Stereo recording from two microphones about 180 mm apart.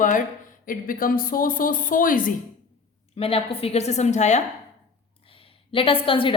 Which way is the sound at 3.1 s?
30° left (ahead or behind).